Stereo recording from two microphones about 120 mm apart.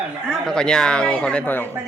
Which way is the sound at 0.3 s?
5° left (ahead or behind).